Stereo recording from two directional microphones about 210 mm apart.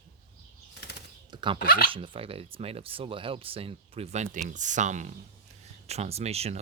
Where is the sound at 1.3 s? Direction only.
25° right (ahead or behind).